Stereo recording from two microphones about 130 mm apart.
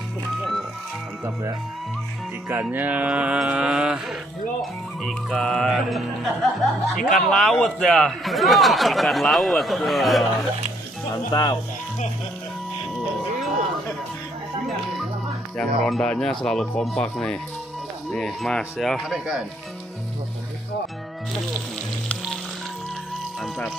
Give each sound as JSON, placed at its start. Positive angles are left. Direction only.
{"t": 2.4, "sound": "mantra", "side_deg": -15}
{"t": 5.0, "sound": "a man's voice", "side_deg": 0}
{"t": 11.3, "sound": "speech", "side_deg": 35}
{"t": 15.5, "sound": "a man's voice", "side_deg": 5}